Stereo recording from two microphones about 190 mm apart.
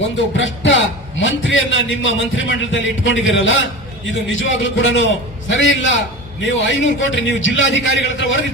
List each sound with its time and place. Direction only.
0.3 s a man's voice: 80° left